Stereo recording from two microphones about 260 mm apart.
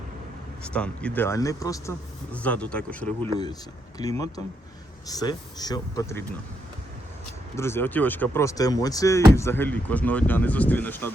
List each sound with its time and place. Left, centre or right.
0.6 s speech: centre
7.5 s speech: centre